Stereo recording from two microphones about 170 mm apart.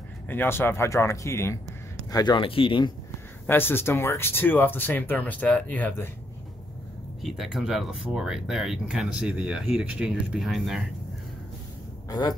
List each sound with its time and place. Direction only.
0.3 s speech: 10° left (ahead or behind); by 2.9 s 30° left (ahead or behind)
3.4 s speech: 10° left (ahead or behind)
7.2 s speech: centre (ahead or behind)
12.1 s speech: 25° left (ahead or behind)